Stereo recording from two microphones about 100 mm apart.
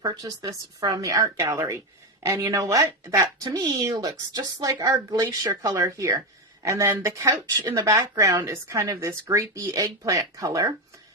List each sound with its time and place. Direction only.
0.0 s a woman's voice: 35° right (ahead or behind)